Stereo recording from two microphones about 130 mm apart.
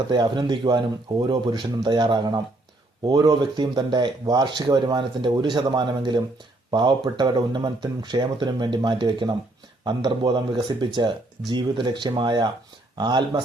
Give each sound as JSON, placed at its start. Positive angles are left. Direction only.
{"t": 0.1, "sound": "speech", "side_deg": -35}